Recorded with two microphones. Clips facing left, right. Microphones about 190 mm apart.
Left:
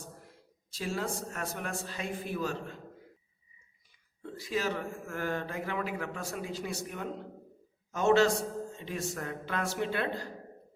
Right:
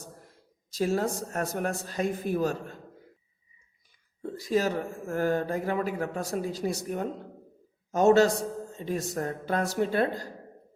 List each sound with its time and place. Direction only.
0.7 s a man's voice: 40° right (ahead or behind)
4.2 s a man's voice: 40° right (ahead or behind)